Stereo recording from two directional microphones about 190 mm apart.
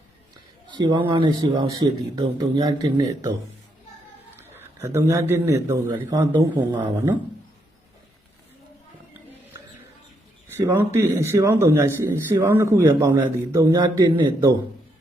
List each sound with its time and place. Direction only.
0.7 s speech: 25° right (ahead or behind)
4.4 s a sound: 10° right (ahead or behind)
4.9 s speech: 15° right (ahead or behind)
10.6 s speech: 10° right (ahead or behind)